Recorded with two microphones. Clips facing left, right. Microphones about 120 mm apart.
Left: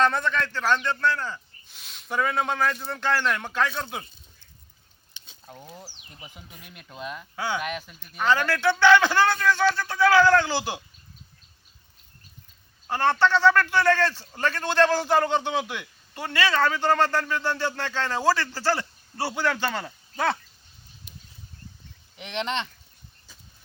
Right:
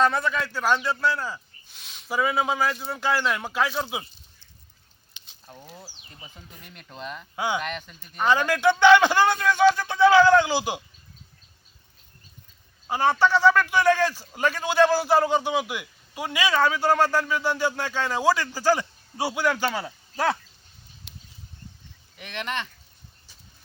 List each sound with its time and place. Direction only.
0.0 s speech: 5° right (ahead or behind)
5.5 s speech: 15° left (ahead or behind)
7.3 s a man's voice: 15° right (ahead or behind)
7.6 s speech: 5° left (ahead or behind)
8.2 s a man's voice: 15° right (ahead or behind)
12.9 s a man's voice: 10° right (ahead or behind)
21.1 s a sound: 90° right
22.2 s speech: 20° left (ahead or behind)